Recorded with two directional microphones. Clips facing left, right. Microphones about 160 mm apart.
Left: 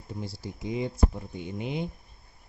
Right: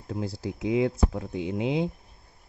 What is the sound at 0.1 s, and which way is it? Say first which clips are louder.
Speech: right 6 dB; 90° right.